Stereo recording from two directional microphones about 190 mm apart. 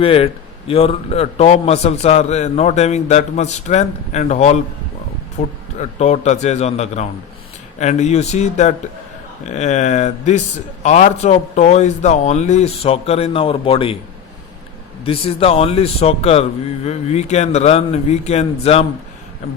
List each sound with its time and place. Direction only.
0.0 s a man's voice: 30° left (ahead or behind)
15.0 s a man's voice: 30° left (ahead or behind)